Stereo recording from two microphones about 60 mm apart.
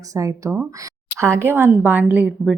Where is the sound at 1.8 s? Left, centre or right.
Right.